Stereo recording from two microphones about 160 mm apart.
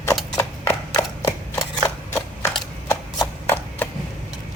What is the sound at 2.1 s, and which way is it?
Typewriter, 15° left (ahead or behind).